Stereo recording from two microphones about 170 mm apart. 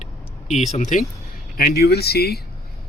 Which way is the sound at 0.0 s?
40° left (ahead or behind).